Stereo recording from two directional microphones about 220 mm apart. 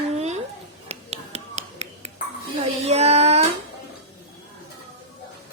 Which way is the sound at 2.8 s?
30° right (ahead or behind).